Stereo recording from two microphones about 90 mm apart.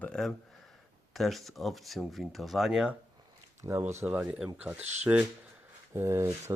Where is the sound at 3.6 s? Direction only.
50° right (ahead or behind).